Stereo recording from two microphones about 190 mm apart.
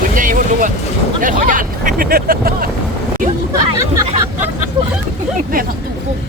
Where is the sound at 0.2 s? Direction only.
45° right (ahead or behind).